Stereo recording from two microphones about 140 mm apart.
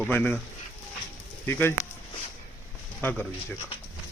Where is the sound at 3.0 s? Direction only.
15° left (ahead or behind).